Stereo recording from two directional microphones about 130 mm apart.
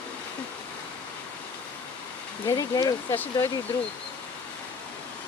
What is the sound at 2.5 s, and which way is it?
Speech, 25° left (ahead or behind).